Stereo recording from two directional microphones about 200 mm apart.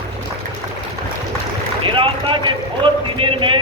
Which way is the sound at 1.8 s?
25° right (ahead or behind).